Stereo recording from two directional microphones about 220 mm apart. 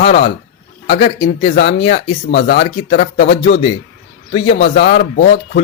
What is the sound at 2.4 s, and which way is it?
Speech, 30° left (ahead or behind).